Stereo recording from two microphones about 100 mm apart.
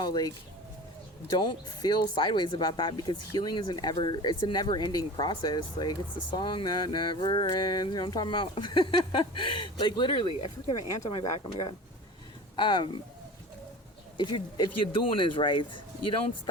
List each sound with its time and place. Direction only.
0.0 s speech: 45° left (ahead or behind); by 11.4 s 80° left
12.5 s speech: 50° left (ahead or behind)
14.2 s speech: 50° left (ahead or behind)